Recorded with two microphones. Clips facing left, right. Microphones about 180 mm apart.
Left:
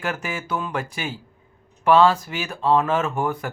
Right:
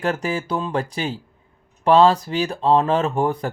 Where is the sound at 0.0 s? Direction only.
35° right (ahead or behind).